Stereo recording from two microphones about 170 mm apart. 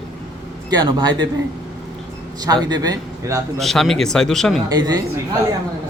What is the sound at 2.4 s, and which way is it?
Speech, 20° right (ahead or behind).